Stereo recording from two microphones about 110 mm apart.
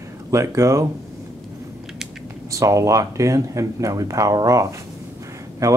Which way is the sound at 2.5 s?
30° right (ahead or behind).